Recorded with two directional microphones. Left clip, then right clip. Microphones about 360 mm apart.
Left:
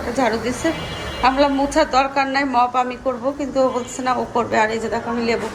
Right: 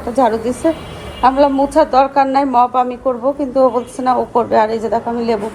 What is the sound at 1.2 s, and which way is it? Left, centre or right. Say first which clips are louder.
A woman's voice: right 5 dB; centre.